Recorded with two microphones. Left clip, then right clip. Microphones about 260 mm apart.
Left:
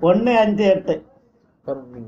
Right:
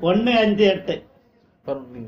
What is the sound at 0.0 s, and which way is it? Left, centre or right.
Speech, left.